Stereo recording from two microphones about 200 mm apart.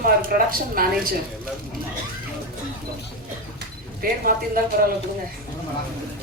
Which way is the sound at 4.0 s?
45° right (ahead or behind).